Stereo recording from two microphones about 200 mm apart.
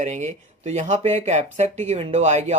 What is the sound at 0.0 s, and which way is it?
Speech, 35° right (ahead or behind).